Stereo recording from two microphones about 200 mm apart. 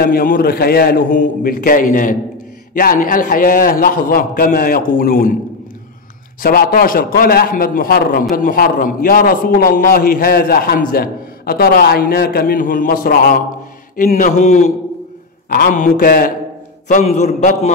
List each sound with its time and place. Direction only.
0.0 s a man's voice: 45° left (ahead or behind)
6.4 s a man's voice: 45° left (ahead or behind)
16.8 s a man's voice: 35° left (ahead or behind)